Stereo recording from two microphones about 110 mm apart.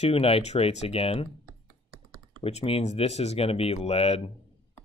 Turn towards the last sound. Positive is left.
turn(degrees=65)  # may be behind; listen again after turning